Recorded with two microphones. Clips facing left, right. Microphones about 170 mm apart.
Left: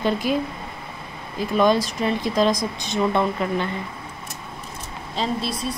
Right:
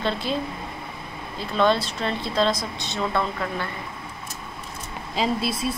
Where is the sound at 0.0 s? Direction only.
10° left (ahead or behind).